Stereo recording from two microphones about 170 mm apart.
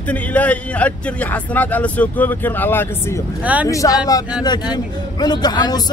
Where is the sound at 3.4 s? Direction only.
10° right (ahead or behind).